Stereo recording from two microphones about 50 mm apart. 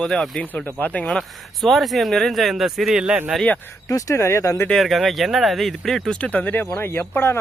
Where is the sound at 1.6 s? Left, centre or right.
Centre.